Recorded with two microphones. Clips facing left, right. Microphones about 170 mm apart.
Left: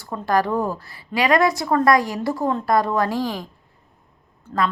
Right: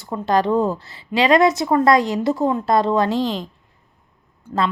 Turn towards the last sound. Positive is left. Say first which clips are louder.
# right 2 dB
turn(degrees=-10)  # may be behind; listen again after turning